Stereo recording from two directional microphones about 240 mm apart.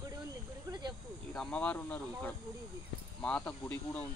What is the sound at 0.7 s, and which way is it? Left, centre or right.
Snake, centre.